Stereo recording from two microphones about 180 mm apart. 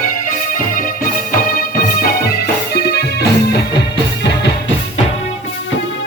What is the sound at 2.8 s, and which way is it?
Music, 60° left (ahead or behind).